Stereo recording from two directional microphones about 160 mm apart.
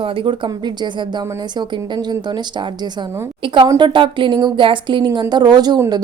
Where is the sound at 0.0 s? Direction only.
30° right (ahead or behind).